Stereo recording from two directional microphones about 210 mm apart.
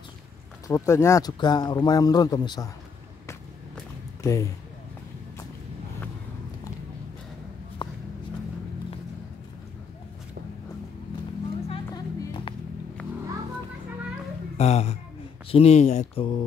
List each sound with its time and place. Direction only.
0.7 s speech: 15° left (ahead or behind)
4.2 s speech: 15° left (ahead or behind)
7.8 s a sound: 25° left (ahead or behind)
11.6 s music: 25° left (ahead or behind)
14.6 s speech: 30° left (ahead or behind)